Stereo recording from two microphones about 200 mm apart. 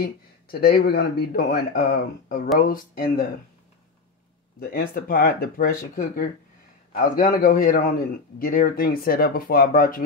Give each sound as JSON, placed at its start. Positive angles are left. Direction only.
{"t": 0.0, "sound": "a man's voice", "side_deg": 50}
{"t": 4.6, "sound": "a man's voice", "side_deg": 50}